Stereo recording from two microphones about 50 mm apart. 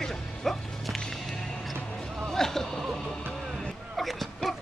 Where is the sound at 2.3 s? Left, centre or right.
Centre.